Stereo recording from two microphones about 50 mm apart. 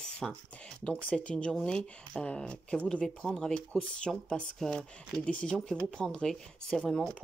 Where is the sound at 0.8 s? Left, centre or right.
Left.